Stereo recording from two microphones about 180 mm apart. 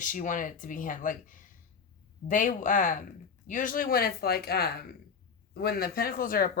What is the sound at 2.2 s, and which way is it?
Speech, 45° left (ahead or behind).